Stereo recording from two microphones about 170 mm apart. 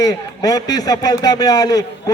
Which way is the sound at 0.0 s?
20° left (ahead or behind).